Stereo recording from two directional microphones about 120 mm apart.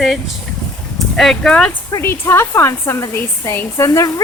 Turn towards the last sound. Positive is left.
turn(degrees=25)  # may be behind; listen again after turning